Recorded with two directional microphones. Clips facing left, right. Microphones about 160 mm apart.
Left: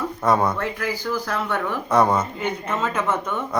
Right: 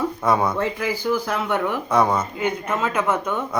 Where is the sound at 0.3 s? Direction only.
Centre (ahead or behind).